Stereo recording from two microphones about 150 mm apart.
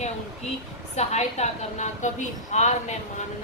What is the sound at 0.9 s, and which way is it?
A woman's voice, 50° left (ahead or behind).